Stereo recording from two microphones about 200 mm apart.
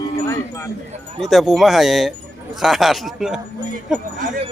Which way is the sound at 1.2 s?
Centre (ahead or behind).